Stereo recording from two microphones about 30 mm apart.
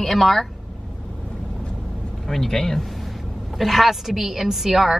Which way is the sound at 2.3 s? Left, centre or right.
Centre.